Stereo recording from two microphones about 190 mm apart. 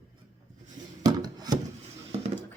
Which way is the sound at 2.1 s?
35° right (ahead or behind).